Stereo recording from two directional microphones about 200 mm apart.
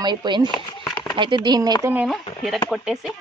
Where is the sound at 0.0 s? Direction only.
20° right (ahead or behind).